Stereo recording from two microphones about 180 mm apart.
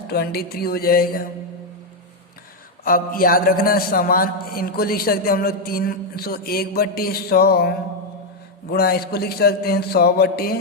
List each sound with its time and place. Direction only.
0.1 s a man's voice: 60° left (ahead or behind)
2.8 s a man's voice: 50° left (ahead or behind)
8.7 s a man's voice: 60° left (ahead or behind)